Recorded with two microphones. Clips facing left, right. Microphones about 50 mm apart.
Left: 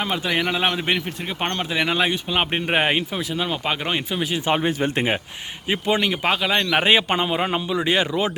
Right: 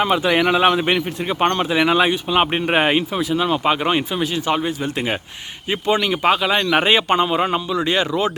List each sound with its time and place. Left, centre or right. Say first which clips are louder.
0.0 s speech: right 6 dB; right
0.6 s a man's voice: right 6 dB; centre
4.4 s speech: left 1 dB; left
5.6 s a man's voice: right 2 dB; centre